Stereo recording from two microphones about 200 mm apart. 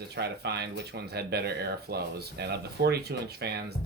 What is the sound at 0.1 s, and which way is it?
Speech, 55° right (ahead or behind).